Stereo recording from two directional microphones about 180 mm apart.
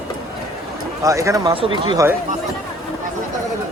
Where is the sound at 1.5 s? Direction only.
30° right (ahead or behind).